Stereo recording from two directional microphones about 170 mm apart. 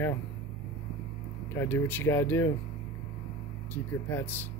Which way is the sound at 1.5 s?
15° left (ahead or behind).